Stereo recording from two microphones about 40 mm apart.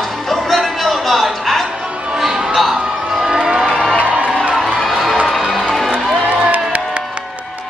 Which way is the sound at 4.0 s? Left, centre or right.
Right.